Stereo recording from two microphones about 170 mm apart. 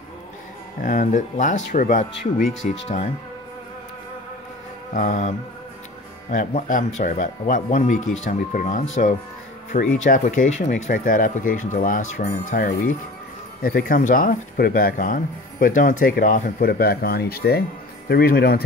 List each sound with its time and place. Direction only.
0.8 s speech: 50° left (ahead or behind)
4.9 s speech: 45° left (ahead or behind)
6.3 s speech: 45° left (ahead or behind); by 18.6 s 65° left (ahead or behind)